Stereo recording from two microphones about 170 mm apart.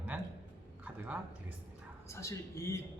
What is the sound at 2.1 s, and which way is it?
Speech, 15° left (ahead or behind).